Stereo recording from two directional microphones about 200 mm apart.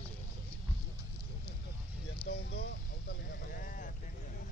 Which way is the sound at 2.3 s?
55° left (ahead or behind).